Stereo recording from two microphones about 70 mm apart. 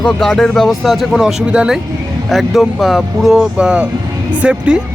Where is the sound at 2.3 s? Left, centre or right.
Centre.